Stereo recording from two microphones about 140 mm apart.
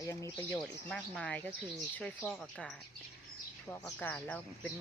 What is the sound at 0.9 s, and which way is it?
Speech, 10° left (ahead or behind).